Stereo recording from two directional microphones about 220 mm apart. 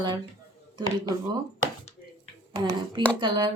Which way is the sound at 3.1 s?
20° right (ahead or behind).